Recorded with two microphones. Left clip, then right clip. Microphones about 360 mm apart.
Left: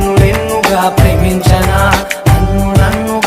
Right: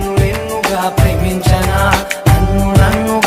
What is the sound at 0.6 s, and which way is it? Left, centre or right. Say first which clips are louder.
Music: left 4 dB; left.